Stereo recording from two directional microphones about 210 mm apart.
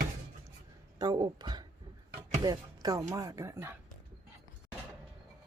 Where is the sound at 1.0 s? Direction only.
20° right (ahead or behind).